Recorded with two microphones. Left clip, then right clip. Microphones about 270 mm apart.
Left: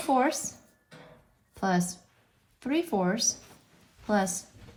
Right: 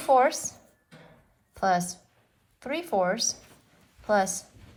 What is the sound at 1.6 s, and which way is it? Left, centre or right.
A woman's voice, right.